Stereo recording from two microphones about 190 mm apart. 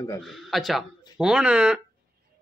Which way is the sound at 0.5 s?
Centre (ahead or behind).